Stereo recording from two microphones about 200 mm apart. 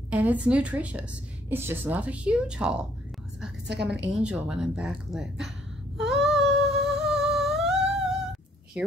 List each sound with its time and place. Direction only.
0.1 s a woman's voice: 5° right (ahead or behind)
4.1 s a woman's voice: 5° right (ahead or behind)
5.9 s a sound: centre (ahead or behind)
6.6 s humming: centre (ahead or behind)